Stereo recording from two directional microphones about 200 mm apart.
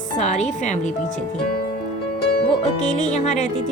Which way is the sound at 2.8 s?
35° left (ahead or behind).